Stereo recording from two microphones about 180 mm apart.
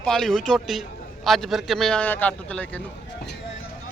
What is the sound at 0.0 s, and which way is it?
A man's voice, centre (ahead or behind).